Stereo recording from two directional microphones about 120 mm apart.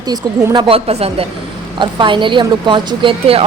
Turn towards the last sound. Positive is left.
turn(degrees=-50)  # may be behind; listen again after turning